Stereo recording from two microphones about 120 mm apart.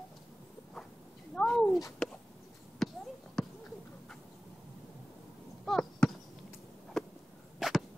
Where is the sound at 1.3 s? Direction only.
10° left (ahead or behind).